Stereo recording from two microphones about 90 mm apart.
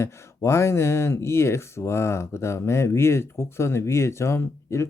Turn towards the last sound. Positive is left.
turn(degrees=30)  # may be behind; listen again after turning